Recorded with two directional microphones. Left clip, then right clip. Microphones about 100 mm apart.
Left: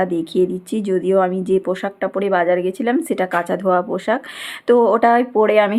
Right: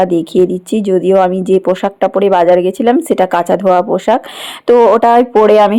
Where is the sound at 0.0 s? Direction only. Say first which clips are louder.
Right 7 dB; 45° right (ahead or behind).